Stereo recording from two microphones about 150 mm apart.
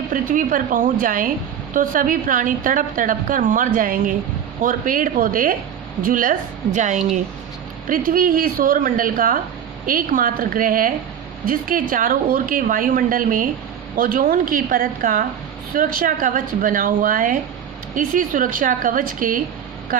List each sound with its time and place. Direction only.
0.1 s a woman's voice: 65° right (ahead or behind)
7.9 s a woman's voice: 70° right (ahead or behind)